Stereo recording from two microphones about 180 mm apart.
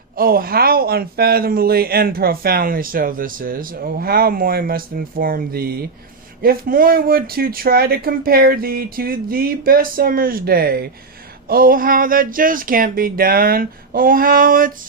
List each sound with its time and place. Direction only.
0.2 s speech: 55° right (ahead or behind)